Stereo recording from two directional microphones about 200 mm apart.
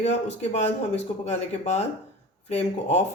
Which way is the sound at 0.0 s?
35° left (ahead or behind).